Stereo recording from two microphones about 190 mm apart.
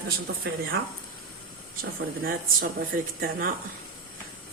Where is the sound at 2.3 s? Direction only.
50° right (ahead or behind).